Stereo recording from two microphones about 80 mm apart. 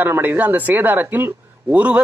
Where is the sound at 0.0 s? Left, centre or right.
Right.